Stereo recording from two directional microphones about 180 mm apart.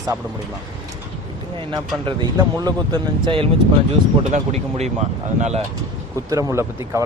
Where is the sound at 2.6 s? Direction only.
25° right (ahead or behind).